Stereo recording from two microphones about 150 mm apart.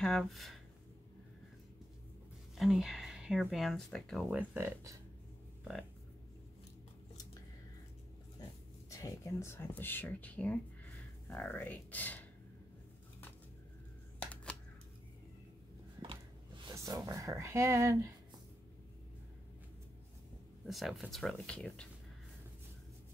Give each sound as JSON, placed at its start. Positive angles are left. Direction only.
{"t": 0.0, "sound": "speech", "side_deg": 0}
{"t": 2.5, "sound": "speech", "side_deg": 0}
{"t": 4.3, "sound": "speech", "side_deg": -10}
{"t": 8.9, "sound": "speech", "side_deg": 20}
{"t": 14.2, "sound": "camera", "side_deg": 5}
{"t": 16.6, "sound": "speech", "side_deg": -20}
{"t": 20.6, "sound": "speech", "side_deg": 0}